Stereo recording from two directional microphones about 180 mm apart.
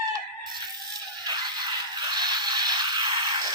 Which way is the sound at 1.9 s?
25° right (ahead or behind).